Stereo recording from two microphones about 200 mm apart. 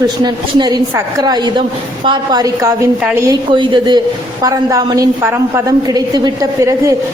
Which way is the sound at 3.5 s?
20° right (ahead or behind).